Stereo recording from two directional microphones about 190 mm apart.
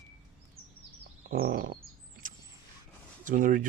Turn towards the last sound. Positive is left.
turn(degrees=-45)  # may be behind; listen again after turning